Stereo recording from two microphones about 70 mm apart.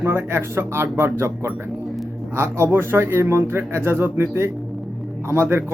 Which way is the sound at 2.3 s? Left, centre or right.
Right.